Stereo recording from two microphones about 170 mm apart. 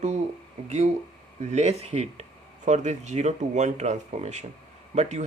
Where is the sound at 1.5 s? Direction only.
40° right (ahead or behind).